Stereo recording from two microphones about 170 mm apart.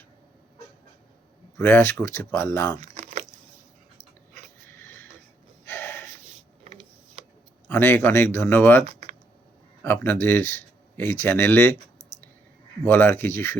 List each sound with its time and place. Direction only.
1.5 s speech: 15° left (ahead or behind)
2.8 s a sound: 40° right (ahead or behind)
4.7 s a sound: 15° left (ahead or behind)
5.6 s gasp: 10° left (ahead or behind)
7.7 s speech: 10° left (ahead or behind)
8.9 s computer keyboard: 45° right (ahead or behind)
9.8 s speech: 10° left (ahead or behind)
12.8 s speech: 10° left (ahead or behind)